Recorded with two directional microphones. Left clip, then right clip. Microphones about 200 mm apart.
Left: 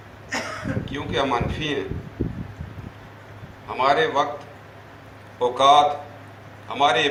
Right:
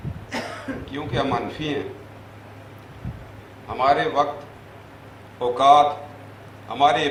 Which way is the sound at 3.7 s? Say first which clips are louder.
Even; 30° left (ahead or behind).